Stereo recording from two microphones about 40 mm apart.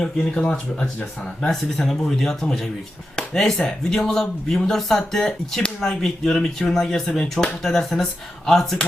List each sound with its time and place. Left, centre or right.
0.0 s speech: left
1.5 s speech: centre
6.7 s speech: centre